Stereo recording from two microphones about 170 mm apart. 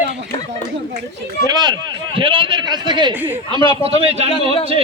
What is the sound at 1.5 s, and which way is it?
A man's voice, 25° right (ahead or behind).